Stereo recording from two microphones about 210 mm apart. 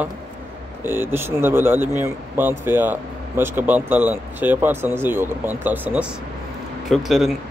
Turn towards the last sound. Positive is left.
turn(degrees=0)  # may be behind; listen again after turning